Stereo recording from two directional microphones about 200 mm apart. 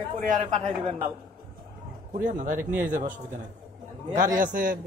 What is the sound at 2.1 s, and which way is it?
Speech, 40° right (ahead or behind).